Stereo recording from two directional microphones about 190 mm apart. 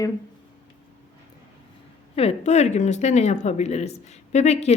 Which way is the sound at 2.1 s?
35° left (ahead or behind).